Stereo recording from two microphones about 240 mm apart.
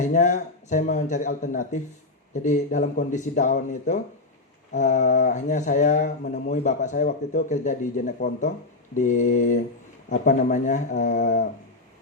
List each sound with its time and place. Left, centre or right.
0.0 s speech: left